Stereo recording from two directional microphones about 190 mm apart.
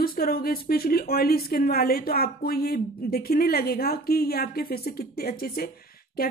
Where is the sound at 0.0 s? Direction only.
50° left (ahead or behind).